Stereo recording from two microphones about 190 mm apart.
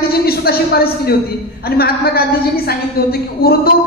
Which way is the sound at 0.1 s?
55° left (ahead or behind).